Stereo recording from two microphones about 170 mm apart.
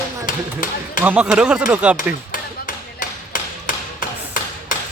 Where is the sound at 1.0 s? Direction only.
5° right (ahead or behind).